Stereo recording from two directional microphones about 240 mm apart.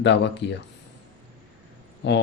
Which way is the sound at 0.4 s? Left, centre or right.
Left.